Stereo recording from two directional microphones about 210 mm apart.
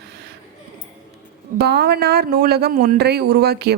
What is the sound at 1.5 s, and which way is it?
Speech, 50° right (ahead or behind).